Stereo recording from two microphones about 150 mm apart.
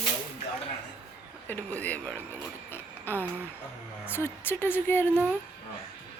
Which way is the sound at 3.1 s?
15° left (ahead or behind).